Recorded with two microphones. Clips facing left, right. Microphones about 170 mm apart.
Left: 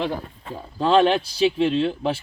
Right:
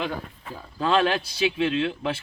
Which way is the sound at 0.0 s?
30° left (ahead or behind).